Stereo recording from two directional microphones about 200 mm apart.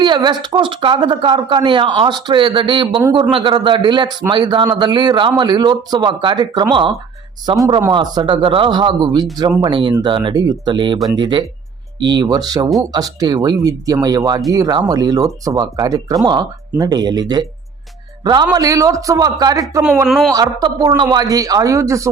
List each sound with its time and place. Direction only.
0.0 s speech: 20° right (ahead or behind)
7.9 s speech: 20° right (ahead or behind)
19.8 s speech: 5° right (ahead or behind)
20.3 s speech: 20° right (ahead or behind)